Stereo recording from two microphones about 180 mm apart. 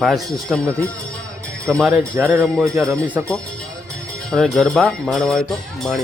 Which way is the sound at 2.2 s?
15° right (ahead or behind).